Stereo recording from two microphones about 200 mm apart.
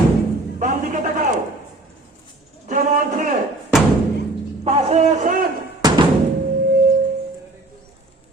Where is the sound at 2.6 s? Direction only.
40° right (ahead or behind).